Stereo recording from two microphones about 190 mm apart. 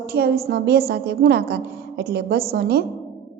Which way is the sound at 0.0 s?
55° right (ahead or behind).